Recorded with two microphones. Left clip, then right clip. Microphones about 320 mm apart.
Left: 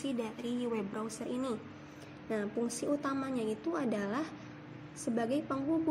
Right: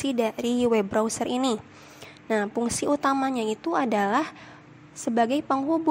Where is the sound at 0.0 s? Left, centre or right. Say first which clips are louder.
Right 12 dB; right.